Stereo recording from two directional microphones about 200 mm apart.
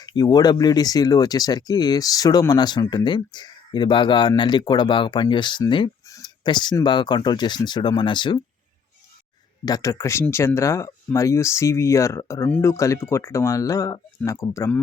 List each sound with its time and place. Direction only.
0.0 s speech: 20° left (ahead or behind)
9.6 s speech: 15° left (ahead or behind)